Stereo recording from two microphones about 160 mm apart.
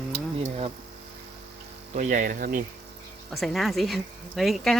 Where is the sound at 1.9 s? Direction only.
55° right (ahead or behind).